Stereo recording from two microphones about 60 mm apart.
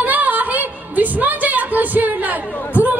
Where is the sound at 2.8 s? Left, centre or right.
Right.